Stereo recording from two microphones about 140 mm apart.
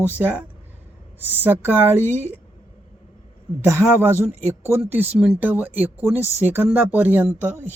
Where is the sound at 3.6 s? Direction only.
20° right (ahead or behind).